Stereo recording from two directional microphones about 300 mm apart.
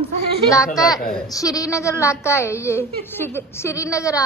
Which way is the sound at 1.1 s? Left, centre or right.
Centre.